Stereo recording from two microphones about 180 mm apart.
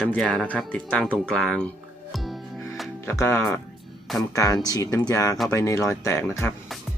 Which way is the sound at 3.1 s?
15° left (ahead or behind).